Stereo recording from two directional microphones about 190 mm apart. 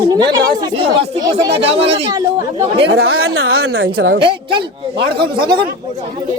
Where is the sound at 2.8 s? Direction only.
65° right (ahead or behind); by 3.9 s 90° right.